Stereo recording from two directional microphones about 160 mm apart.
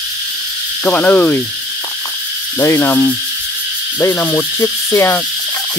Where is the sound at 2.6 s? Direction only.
15° left (ahead or behind).